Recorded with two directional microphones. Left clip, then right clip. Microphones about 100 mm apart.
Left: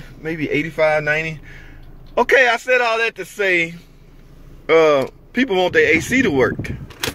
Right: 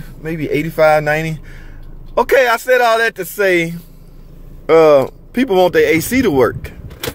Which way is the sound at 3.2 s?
40° right (ahead or behind).